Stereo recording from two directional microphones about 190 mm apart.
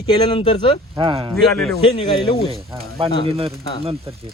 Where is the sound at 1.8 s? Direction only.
25° left (ahead or behind).